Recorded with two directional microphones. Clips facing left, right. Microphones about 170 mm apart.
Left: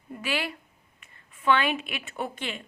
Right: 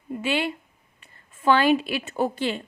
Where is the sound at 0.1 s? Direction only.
25° right (ahead or behind).